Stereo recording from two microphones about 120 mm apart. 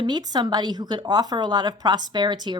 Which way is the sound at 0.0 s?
35° right (ahead or behind).